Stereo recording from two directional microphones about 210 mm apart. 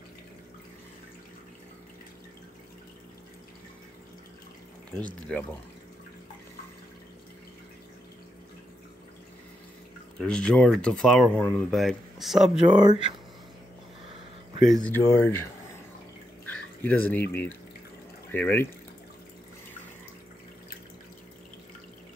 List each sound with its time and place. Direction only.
5.0 s speech: 5° left (ahead or behind)
10.1 s speech: 5° left (ahead or behind)
12.4 s speech: 20° right (ahead or behind)
14.7 s speech: 5° left (ahead or behind)
16.4 s a sound: 5° left (ahead or behind)
17.3 s speech: 10° left (ahead or behind)